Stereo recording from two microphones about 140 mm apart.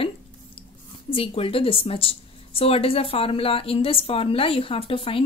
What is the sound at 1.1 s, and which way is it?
A woman's voice, 40° left (ahead or behind).